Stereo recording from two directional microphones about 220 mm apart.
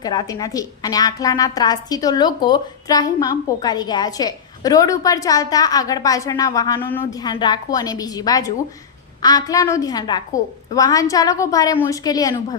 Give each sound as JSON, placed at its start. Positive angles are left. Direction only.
{"t": 0.0, "sound": "a woman's voice", "side_deg": 20}